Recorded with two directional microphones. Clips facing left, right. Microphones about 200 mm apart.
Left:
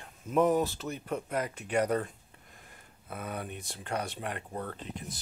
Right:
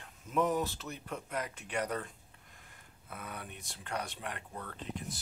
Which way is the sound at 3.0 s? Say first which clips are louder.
Left 7 dB; 45° left (ahead or behind).